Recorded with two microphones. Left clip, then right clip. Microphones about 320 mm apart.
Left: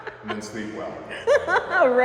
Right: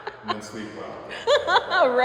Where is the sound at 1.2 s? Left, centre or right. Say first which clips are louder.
Even; centre.